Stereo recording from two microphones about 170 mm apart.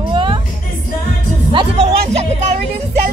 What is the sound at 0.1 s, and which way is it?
Music, 30° right (ahead or behind).